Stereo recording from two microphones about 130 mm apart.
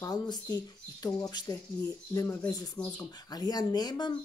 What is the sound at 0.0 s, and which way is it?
Speech, 30° left (ahead or behind).